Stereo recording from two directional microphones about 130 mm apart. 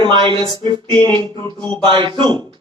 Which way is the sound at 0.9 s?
10° left (ahead or behind).